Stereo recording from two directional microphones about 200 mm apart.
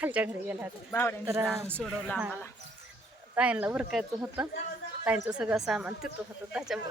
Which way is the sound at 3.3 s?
5° right (ahead or behind).